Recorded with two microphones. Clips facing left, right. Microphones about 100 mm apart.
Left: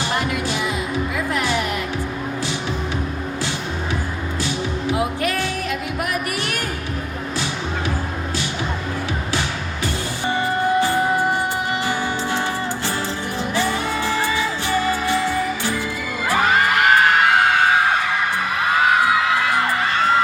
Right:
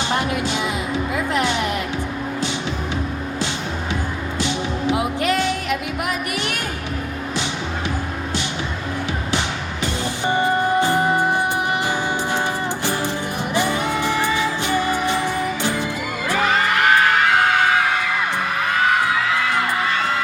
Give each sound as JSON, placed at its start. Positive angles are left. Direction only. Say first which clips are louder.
{"t": 0.1, "sound": "music", "louder": "right 1 dB", "side_deg": -20}
{"t": 4.4, "sound": "music", "louder": "right 2 dB", "side_deg": -20}
{"t": 9.8, "sound": "music", "louder": "right 2 dB", "side_deg": -20}
{"t": 13.5, "sound": "music", "louder": "right 2 dB", "side_deg": -20}